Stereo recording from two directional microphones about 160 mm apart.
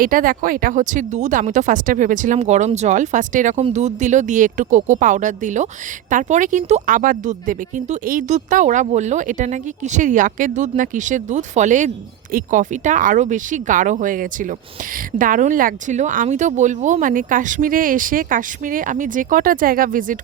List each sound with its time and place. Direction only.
0.0 s speech: 60° right (ahead or behind)